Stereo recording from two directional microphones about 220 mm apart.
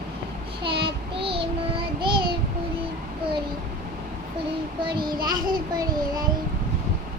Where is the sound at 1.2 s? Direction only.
25° right (ahead or behind).